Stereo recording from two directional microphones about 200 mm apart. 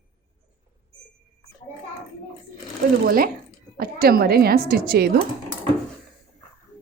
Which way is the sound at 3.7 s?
50° right (ahead or behind).